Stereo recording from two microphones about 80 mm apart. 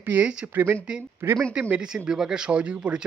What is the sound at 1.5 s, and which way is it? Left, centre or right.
Speech, centre.